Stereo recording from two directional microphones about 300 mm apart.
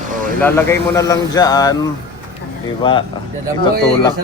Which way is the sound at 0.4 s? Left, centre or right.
Centre.